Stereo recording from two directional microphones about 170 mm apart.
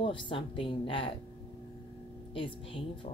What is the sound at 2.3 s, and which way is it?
Speech, 30° left (ahead or behind).